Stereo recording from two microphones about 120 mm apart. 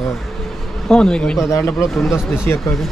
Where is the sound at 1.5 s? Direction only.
25° left (ahead or behind).